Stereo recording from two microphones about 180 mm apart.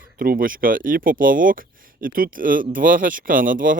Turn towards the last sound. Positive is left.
turn(degrees=-50)  # may be behind; listen again after turning